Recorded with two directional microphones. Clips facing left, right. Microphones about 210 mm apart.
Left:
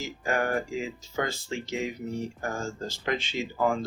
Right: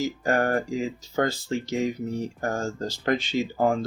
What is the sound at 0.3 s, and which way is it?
Speech, 35° right (ahead or behind).